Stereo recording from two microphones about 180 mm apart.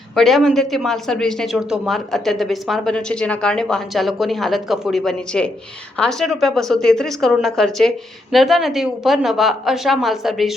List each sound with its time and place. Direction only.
0.2 s speech: centre (ahead or behind)